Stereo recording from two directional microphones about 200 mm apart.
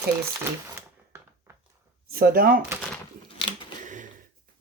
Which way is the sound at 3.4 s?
25° left (ahead or behind).